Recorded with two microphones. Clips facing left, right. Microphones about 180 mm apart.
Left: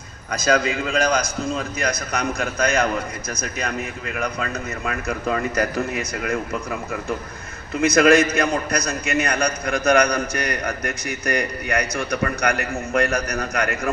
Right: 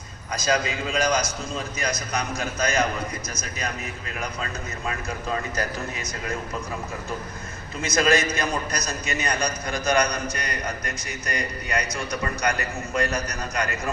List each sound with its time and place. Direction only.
0.3 s a man's voice: 55° left (ahead or behind)
7.8 s a man's voice: 60° left (ahead or behind)